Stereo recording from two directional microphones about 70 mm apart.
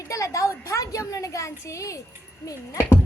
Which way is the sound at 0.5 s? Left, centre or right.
Left.